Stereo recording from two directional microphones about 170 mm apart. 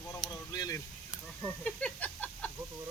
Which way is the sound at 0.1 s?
25° left (ahead or behind).